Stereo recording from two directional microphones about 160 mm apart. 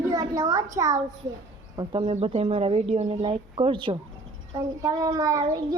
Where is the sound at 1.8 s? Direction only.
30° right (ahead or behind).